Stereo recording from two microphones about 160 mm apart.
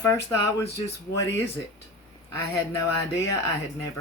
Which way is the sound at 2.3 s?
20° left (ahead or behind).